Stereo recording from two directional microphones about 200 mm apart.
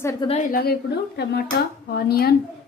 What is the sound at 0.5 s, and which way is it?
Speech, 50° left (ahead or behind).